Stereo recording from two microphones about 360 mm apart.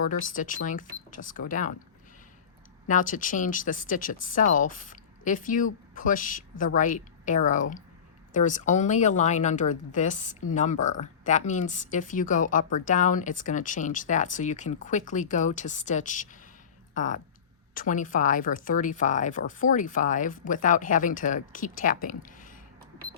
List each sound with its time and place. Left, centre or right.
0.0 s speech: left
2.8 s speech: left